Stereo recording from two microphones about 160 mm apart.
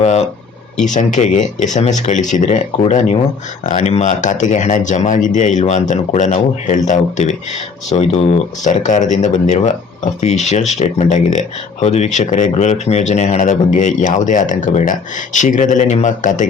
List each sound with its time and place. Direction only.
0.0 s speech: 45° left (ahead or behind)